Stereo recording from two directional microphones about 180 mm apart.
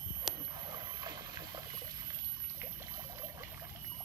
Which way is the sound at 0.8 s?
25° right (ahead or behind).